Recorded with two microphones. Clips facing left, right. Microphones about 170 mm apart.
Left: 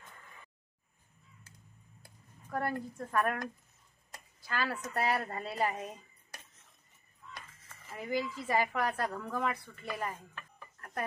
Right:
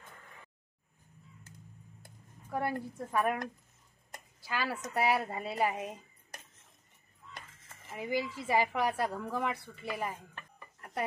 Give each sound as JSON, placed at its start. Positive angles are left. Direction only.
{"t": 2.5, "sound": "a woman's voice", "side_deg": -10}
{"t": 4.4, "sound": "a woman's voice", "side_deg": -5}
{"t": 7.3, "sound": "a sound", "side_deg": -20}
{"t": 7.9, "sound": "a woman's voice", "side_deg": -10}